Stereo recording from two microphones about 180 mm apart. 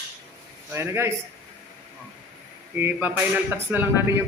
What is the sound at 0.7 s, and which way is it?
Speech, 15° right (ahead or behind).